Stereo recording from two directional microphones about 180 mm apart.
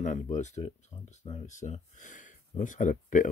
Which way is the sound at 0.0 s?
40° left (ahead or behind).